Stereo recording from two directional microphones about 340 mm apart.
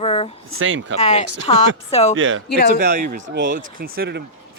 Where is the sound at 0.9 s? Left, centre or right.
Centre.